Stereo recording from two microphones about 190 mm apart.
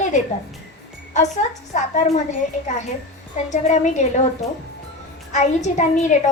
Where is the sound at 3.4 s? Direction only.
40° left (ahead or behind).